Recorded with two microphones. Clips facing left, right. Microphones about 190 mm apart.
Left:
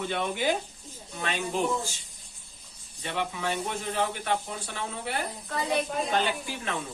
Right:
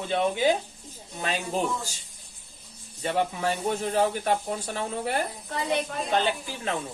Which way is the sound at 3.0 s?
40° right (ahead or behind).